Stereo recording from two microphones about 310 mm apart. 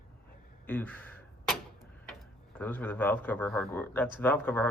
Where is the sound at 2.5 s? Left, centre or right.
Centre.